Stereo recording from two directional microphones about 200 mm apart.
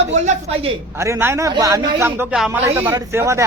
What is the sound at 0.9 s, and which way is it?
Speech, 15° right (ahead or behind).